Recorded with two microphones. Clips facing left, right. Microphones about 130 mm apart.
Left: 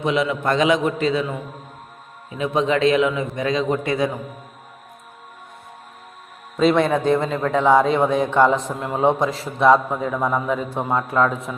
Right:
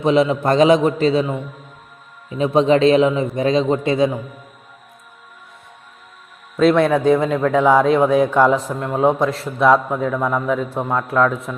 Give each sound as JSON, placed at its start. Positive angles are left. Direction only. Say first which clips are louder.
{"t": 0.0, "sound": "a man's voice", "louder": "right 5 dB", "side_deg": -35}
{"t": 6.6, "sound": "a man's voice", "louder": "right 3 dB", "side_deg": 0}